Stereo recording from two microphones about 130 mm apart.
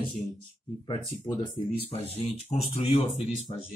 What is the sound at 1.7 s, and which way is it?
Speech, 50° left (ahead or behind).